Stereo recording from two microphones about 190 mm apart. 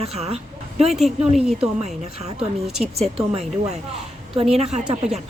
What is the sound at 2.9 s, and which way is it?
Speech, 30° right (ahead or behind).